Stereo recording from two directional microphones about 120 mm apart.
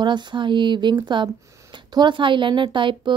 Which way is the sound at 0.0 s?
40° right (ahead or behind).